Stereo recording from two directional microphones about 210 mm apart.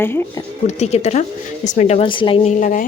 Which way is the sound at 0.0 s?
10° left (ahead or behind).